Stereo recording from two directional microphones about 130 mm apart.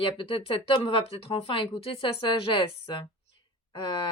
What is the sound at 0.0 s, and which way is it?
Speech, 40° left (ahead or behind).